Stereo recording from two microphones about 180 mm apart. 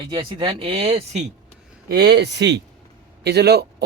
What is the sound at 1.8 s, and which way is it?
Speech, 65° right (ahead or behind).